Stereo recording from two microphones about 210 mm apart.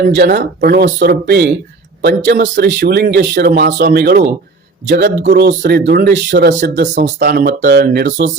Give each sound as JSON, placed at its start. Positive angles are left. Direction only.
{"t": 0.0, "sound": "speech", "side_deg": -45}